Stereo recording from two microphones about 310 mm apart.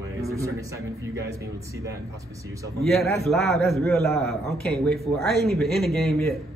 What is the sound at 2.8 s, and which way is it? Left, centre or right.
A man's voice, centre.